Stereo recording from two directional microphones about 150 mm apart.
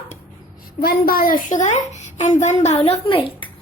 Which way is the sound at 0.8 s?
85° left.